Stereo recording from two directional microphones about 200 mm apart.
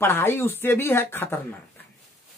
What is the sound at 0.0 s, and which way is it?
Speech, 10° left (ahead or behind).